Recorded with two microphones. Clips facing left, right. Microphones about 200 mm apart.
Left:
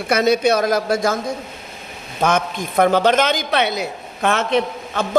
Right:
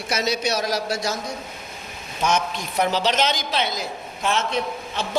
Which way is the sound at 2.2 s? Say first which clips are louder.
Left 4 dB; 55° left (ahead or behind).